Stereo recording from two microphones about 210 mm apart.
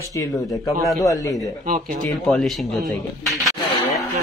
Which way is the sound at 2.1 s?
Centre (ahead or behind).